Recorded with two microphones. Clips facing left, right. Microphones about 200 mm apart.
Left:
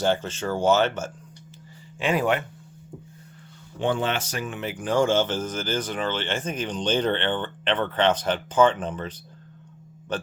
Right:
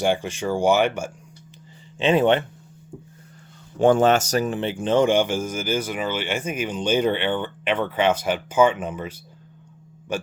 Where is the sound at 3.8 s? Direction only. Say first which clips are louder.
Right 9 dB; 45° right (ahead or behind).